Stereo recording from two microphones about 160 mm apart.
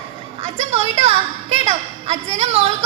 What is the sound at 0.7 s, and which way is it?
A woman's voice, 40° right (ahead or behind).